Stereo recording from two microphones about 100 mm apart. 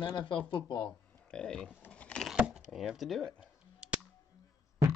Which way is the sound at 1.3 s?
10° left (ahead or behind).